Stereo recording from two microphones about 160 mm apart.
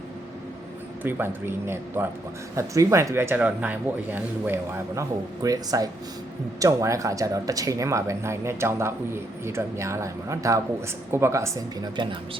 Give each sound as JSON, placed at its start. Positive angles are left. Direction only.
{"t": 1.0, "sound": "speech", "side_deg": -15}